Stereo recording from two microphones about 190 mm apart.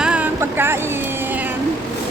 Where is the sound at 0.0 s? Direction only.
5° right (ahead or behind).